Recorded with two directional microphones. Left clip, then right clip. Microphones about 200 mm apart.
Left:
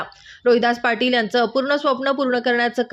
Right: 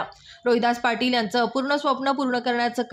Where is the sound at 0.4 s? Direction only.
5° left (ahead or behind).